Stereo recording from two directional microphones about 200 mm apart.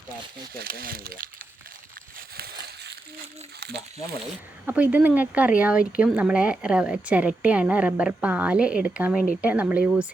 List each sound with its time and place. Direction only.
0.5 s speech: 45° right (ahead or behind)
4.6 s speech: 5° right (ahead or behind)